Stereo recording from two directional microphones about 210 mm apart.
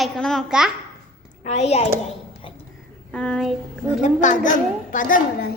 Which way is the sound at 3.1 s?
5° left (ahead or behind).